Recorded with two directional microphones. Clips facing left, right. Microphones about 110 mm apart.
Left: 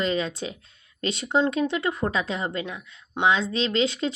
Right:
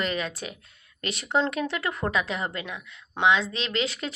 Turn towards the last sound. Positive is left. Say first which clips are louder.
# left 5 dB
turn(degrees=25)  # may be behind; listen again after turning